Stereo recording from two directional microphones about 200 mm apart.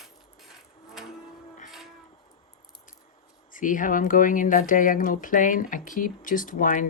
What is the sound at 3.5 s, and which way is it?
Speech, 40° left (ahead or behind).